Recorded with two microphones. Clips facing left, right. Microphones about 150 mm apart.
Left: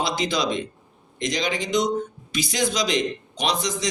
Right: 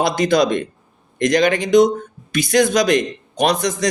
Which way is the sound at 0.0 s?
55° right (ahead or behind).